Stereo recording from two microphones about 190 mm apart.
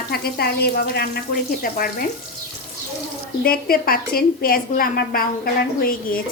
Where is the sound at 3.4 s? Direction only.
50° left (ahead or behind).